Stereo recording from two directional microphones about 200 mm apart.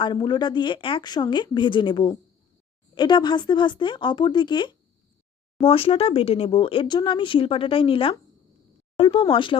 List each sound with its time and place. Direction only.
0.0 s speech: 20° left (ahead or behind)